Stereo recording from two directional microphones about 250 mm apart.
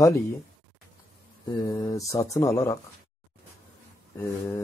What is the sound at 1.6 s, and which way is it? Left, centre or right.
Speech, centre.